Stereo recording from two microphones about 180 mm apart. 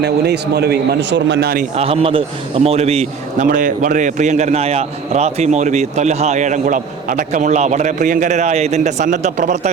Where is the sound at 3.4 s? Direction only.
50° right (ahead or behind).